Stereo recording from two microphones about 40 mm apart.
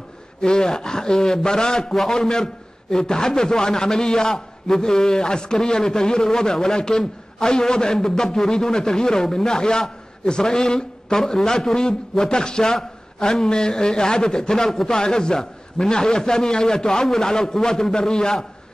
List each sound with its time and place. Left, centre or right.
0.4 s a man's voice: centre